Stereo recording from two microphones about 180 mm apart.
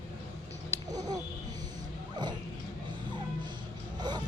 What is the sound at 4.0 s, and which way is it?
Vehicle, 25° right (ahead or behind).